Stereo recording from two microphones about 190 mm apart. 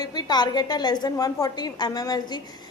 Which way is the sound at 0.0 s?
20° left (ahead or behind).